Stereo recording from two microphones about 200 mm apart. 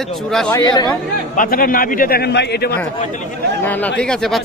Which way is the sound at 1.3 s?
45° left (ahead or behind).